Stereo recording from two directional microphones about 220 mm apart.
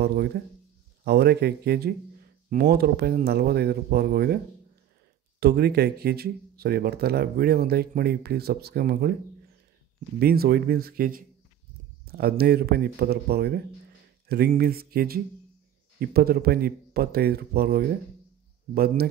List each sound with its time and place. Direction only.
0.0 s speech: 45° right (ahead or behind)
5.4 s speech: 45° right (ahead or behind)
10.1 s speech: 45° right (ahead or behind)